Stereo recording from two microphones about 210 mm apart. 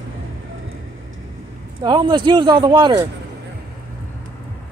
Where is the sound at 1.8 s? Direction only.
20° right (ahead or behind).